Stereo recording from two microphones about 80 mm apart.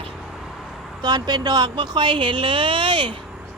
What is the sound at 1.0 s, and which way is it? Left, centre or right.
Speech, right.